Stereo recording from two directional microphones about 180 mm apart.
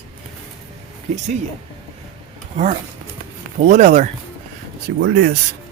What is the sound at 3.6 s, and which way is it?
Speech, 40° right (ahead or behind).